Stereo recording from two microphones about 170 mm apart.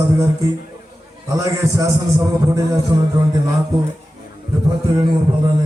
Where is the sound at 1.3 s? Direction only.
20° right (ahead or behind).